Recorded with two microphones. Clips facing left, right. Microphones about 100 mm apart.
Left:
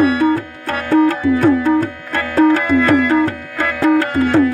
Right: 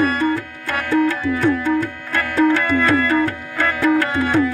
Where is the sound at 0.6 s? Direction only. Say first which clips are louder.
Left 4 dB; 50° left (ahead or behind).